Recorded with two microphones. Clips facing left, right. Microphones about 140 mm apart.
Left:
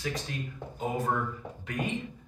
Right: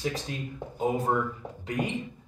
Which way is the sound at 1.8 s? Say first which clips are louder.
Right 3 dB; 20° right (ahead or behind).